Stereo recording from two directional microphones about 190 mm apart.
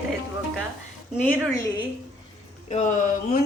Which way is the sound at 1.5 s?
15° left (ahead or behind).